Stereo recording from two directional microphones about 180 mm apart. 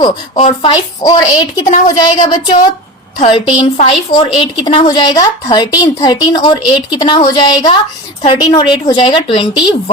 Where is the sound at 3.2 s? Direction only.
30° left (ahead or behind).